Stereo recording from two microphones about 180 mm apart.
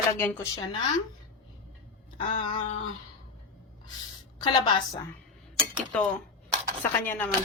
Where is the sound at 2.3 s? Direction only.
30° left (ahead or behind).